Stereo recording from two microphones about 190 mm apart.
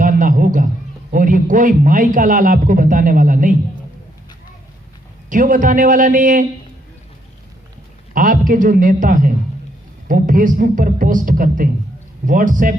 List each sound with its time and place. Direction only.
0.0 s a sound: 45° right (ahead or behind)
1.1 s a man's voice: 45° right (ahead or behind)
5.3 s a man's voice: 45° right (ahead or behind)
8.1 s a man's voice: 45° right (ahead or behind)